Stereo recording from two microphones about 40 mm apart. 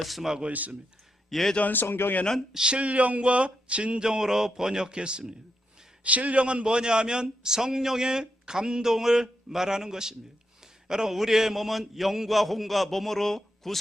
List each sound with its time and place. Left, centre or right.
0.0 s a man's voice: centre
0.4 s speech: right
1.3 s speech: centre
1.7 s speech: left
2.8 s speech: right
4.0 s speech: centre
6.0 s a man's voice: right; by 13.7 s centre